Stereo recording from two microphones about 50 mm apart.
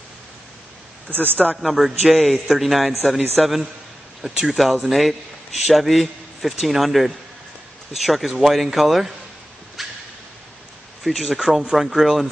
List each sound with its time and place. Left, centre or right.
1.1 s speech: right
1.6 s a man's voice: centre
9.8 s dog: centre
11.1 s a man's voice: centre